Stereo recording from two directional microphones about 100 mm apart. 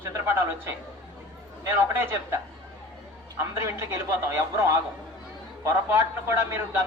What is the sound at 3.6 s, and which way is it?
A woman's voice, 25° right (ahead or behind).